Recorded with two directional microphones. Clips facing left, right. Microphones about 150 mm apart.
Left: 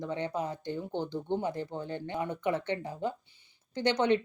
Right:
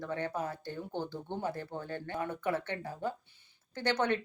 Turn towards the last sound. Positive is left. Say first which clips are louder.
# left 4 dB
turn(degrees=20)  # may be behind; listen again after turning